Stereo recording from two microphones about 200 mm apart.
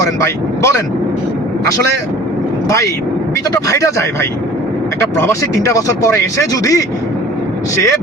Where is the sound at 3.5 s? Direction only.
15° left (ahead or behind).